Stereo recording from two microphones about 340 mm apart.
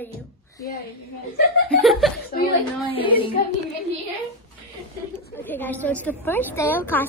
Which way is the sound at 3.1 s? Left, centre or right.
Centre.